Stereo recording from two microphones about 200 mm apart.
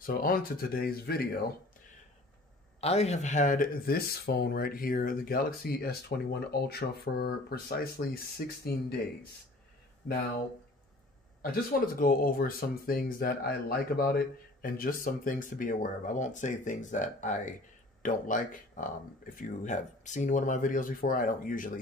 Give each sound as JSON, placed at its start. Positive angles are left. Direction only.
{"t": 0.0, "sound": "speech", "side_deg": 45}
{"t": 2.8, "sound": "speech", "side_deg": 30}
{"t": 12.0, "sound": "speech", "side_deg": 45}